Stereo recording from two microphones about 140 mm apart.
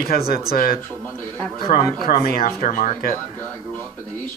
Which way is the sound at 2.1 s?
90° left.